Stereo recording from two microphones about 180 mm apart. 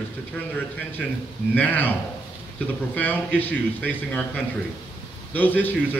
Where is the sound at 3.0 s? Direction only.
10° left (ahead or behind).